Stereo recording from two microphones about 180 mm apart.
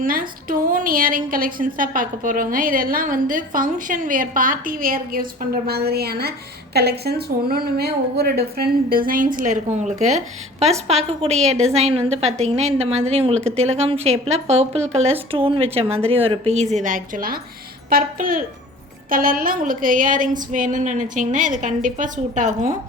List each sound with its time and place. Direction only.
0.0 s a woman's voice: 50° right (ahead or behind)